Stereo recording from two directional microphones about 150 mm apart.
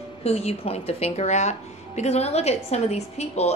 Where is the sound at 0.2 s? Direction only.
45° left (ahead or behind).